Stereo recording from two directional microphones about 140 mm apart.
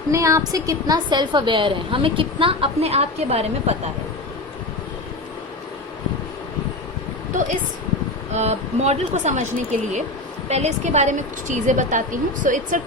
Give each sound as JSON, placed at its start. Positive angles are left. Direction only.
{"t": 0.1, "sound": "a woman's voice", "side_deg": -25}
{"t": 8.3, "sound": "speech", "side_deg": -50}
{"t": 10.5, "sound": "a woman's voice", "side_deg": -50}